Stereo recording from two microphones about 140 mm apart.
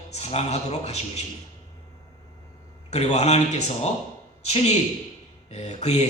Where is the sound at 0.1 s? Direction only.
50° left (ahead or behind).